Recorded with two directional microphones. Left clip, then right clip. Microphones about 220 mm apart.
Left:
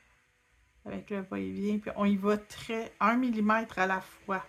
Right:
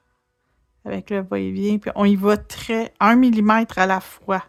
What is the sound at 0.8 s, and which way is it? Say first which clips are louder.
Speech: right 13 dB; 45° right (ahead or behind).